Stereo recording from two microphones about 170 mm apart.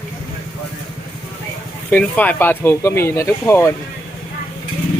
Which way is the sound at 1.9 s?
10° left (ahead or behind).